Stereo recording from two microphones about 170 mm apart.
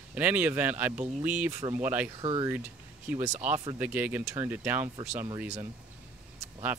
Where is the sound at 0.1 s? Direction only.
10° right (ahead or behind).